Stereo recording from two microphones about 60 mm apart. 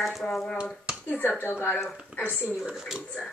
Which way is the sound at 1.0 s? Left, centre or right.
Left.